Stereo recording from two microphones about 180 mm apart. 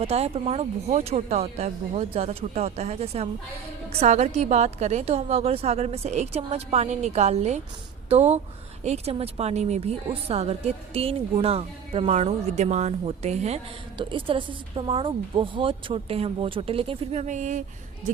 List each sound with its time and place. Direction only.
0.0 s a woman's voice: 35° right (ahead or behind)